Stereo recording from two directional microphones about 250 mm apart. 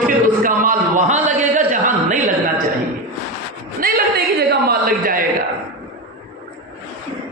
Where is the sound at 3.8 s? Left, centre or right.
Right.